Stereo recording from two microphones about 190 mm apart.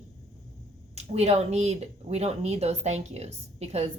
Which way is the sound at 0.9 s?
35° right (ahead or behind).